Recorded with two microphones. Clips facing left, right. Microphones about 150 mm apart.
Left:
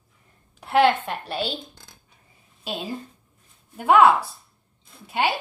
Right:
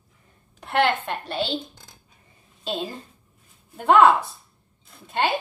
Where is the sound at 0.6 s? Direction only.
5° left (ahead or behind).